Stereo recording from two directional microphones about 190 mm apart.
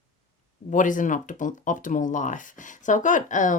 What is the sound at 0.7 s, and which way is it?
Speech, 45° left (ahead or behind).